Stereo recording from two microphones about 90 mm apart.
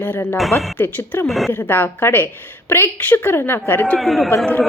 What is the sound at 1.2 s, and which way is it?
Speech, centre (ahead or behind).